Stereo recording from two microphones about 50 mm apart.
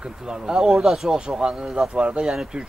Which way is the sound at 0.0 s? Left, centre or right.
Centre.